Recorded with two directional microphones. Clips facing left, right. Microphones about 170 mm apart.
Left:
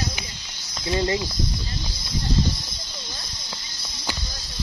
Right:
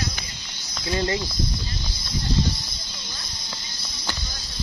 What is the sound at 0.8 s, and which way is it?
Speech, 20° left (ahead or behind).